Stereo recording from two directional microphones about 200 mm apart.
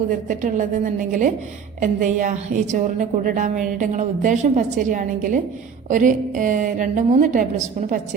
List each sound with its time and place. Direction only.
0.3 s a woman's voice: 40° right (ahead or behind)